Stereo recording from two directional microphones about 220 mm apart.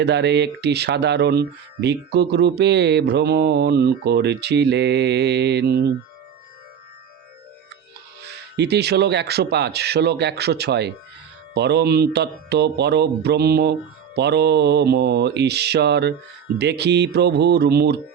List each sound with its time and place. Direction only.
0.0 s speech: 50° right (ahead or behind)
8.2 s speech: 50° right (ahead or behind)